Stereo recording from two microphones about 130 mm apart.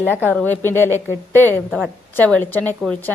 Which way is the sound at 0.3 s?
15° left (ahead or behind).